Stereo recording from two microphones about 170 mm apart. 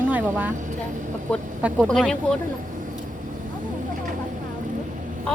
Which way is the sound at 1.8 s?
5° left (ahead or behind).